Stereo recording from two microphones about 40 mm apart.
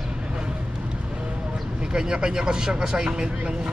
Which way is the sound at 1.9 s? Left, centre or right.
Centre.